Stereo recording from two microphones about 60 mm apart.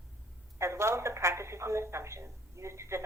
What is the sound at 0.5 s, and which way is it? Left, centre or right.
A woman's voice, right.